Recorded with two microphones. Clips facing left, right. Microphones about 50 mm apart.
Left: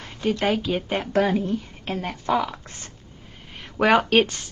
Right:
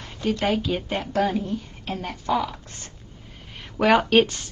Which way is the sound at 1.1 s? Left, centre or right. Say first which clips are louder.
Left 2 dB; left.